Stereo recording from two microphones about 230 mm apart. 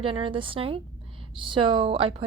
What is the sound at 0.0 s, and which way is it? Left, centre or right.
Speech, right.